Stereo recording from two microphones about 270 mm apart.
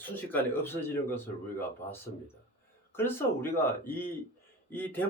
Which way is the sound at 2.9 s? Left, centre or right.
Centre.